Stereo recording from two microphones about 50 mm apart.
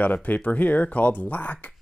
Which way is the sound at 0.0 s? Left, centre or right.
Left.